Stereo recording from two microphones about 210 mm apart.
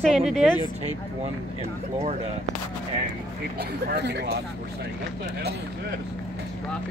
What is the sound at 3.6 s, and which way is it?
Speech, 50° right (ahead or behind).